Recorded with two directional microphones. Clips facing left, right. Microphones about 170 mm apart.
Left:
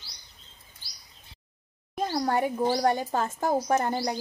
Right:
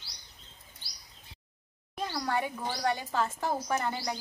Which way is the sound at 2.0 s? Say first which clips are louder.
Left 6 dB; 45° left (ahead or behind).